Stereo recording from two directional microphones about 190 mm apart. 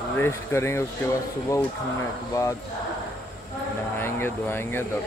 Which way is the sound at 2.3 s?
15° left (ahead or behind).